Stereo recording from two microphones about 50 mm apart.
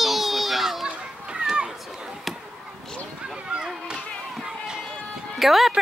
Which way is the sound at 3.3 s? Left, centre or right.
Centre.